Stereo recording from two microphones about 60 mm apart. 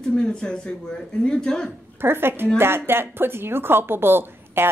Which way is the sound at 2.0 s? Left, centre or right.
Right.